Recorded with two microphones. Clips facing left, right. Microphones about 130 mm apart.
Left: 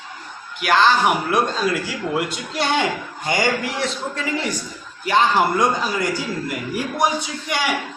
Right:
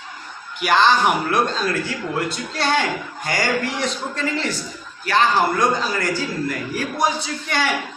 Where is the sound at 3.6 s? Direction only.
5° left (ahead or behind).